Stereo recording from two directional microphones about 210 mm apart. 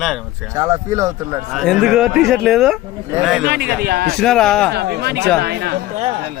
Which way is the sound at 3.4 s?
50° right (ahead or behind).